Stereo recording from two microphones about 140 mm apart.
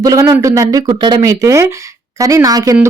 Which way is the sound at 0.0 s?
25° right (ahead or behind).